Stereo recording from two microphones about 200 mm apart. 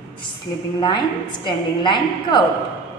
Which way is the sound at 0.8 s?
20° left (ahead or behind).